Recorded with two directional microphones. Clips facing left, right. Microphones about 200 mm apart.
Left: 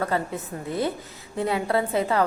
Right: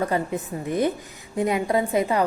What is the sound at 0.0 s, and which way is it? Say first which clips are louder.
A woman's voice: right 2 dB; 15° right (ahead or behind).